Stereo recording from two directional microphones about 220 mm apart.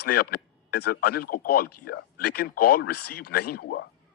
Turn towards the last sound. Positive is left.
turn(degrees=45)  # may be behind; listen again after turning